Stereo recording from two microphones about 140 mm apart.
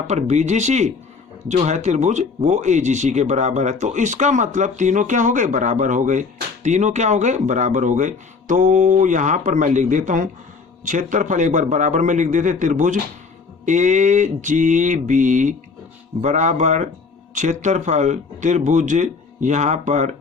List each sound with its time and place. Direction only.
0.1 s speech: 55° right (ahead or behind)